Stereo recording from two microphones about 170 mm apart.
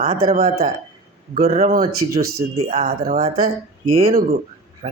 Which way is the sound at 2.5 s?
35° right (ahead or behind).